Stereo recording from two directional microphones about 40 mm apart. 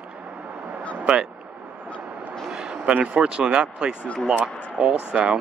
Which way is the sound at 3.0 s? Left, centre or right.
Right.